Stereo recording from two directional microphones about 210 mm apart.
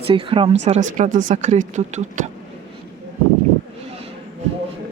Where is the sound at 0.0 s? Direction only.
25° right (ahead or behind).